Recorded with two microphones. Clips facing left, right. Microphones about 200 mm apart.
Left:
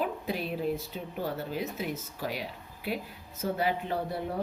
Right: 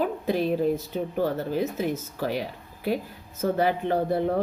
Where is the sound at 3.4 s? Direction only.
50° right (ahead or behind).